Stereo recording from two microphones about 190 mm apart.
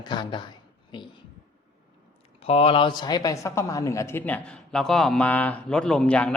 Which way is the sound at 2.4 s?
30° left (ahead or behind).